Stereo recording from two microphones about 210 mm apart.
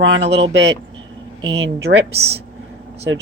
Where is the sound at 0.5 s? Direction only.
60° right (ahead or behind).